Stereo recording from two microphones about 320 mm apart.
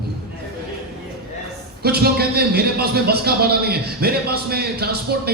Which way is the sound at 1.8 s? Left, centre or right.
Right.